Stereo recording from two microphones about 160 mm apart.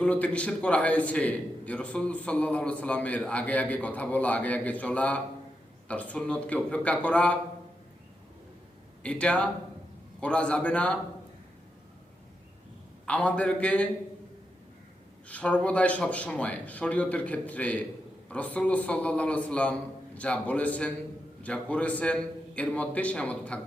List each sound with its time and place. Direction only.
0.0 s a man's voice: 10° left (ahead or behind)
9.0 s a man's voice: 5° left (ahead or behind)
13.1 s a man's voice: 10° left (ahead or behind)
15.3 s a man's voice: 10° left (ahead or behind)